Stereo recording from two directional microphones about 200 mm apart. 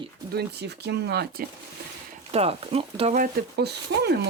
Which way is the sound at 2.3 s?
30° right (ahead or behind).